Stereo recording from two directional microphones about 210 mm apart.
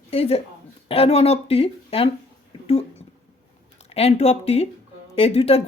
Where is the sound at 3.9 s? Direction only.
30° left (ahead or behind).